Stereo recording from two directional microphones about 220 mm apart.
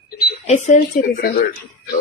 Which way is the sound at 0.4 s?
30° left (ahead or behind).